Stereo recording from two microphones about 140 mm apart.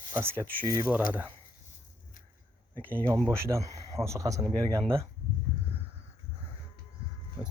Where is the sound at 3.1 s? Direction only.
20° right (ahead or behind).